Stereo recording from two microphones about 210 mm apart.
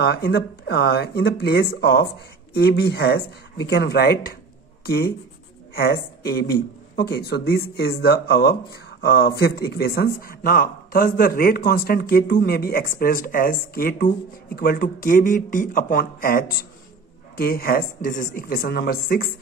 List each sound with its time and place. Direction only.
0.0 s speech: 50° left (ahead or behind)